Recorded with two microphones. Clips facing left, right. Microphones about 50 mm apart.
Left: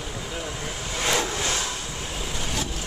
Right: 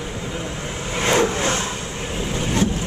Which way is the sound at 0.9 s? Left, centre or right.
Right.